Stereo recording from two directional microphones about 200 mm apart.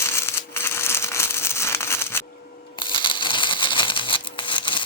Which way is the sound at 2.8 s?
25° left (ahead or behind).